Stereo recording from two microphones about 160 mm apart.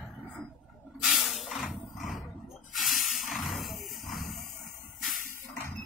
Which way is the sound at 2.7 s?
Centre (ahead or behind).